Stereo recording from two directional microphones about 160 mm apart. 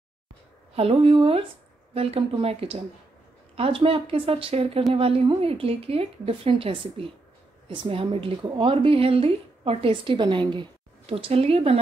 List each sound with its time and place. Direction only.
0.7 s a woman's voice: 35° right (ahead or behind)